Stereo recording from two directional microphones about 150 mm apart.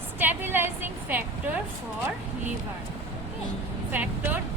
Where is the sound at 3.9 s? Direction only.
10° right (ahead or behind).